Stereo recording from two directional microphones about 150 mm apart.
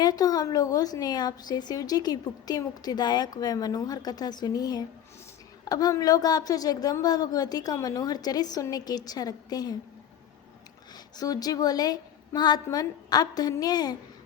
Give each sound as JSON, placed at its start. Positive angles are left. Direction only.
{"t": 0.0, "sound": "a woman's voice", "side_deg": 25}
{"t": 10.9, "sound": "a woman's voice", "side_deg": 25}